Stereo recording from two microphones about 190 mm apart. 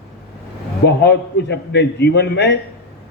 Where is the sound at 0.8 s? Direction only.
65° left (ahead or behind).